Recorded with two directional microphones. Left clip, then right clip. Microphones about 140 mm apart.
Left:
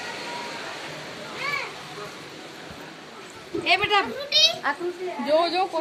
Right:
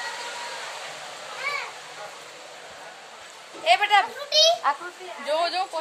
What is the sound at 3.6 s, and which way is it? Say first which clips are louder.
Speech: right 2 dB; 40° right (ahead or behind).